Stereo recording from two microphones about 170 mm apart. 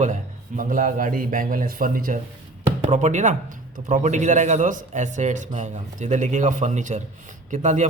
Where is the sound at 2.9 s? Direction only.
45° right (ahead or behind).